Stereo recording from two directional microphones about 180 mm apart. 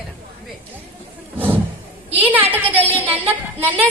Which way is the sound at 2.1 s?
30° right (ahead or behind).